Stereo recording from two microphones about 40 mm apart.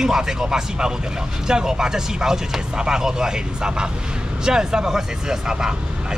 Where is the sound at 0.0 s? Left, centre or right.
Centre.